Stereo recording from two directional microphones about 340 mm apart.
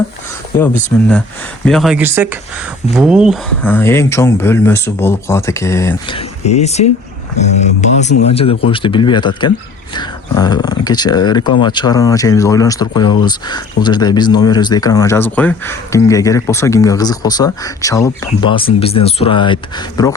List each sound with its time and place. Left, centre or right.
0.5 s speech: centre